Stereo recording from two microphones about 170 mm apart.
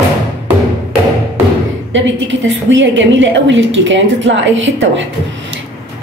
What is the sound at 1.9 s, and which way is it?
A woman's voice, 90° right.